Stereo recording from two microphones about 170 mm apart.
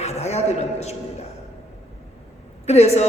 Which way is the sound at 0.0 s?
40° left (ahead or behind).